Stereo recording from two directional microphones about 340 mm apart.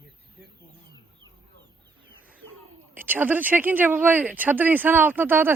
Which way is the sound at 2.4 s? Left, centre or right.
Right.